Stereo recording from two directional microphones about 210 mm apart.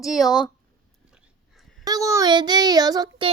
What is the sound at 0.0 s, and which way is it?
Speech, centre (ahead or behind).